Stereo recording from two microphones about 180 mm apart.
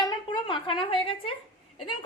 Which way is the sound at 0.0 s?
25° left (ahead or behind).